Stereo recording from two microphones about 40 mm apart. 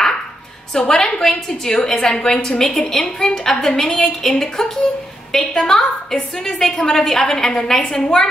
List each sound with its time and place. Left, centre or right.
0.7 s a woman's voice: centre